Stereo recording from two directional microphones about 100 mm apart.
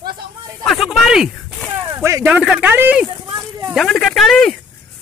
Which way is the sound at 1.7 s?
25° right (ahead or behind).